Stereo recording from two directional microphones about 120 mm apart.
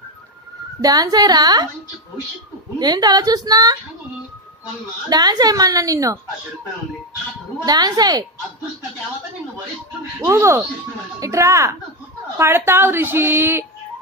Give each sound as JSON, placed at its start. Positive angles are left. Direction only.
{"t": 0.7, "sound": "a woman's voice", "side_deg": -30}
{"t": 2.8, "sound": "a woman's voice", "side_deg": -35}
{"t": 5.1, "sound": "a woman's voice", "side_deg": -35}
{"t": 7.6, "sound": "a woman's voice", "side_deg": -35}
{"t": 10.2, "sound": "a woman's voice", "side_deg": -25}